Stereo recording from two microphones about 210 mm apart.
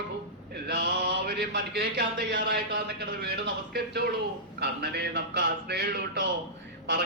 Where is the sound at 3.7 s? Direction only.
50° right (ahead or behind).